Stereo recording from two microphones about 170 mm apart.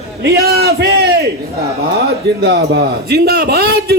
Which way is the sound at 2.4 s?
80° right.